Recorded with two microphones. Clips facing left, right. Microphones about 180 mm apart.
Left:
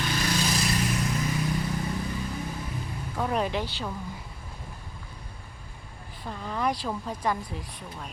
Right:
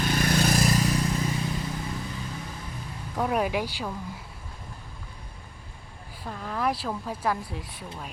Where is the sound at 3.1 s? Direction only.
5° right (ahead or behind).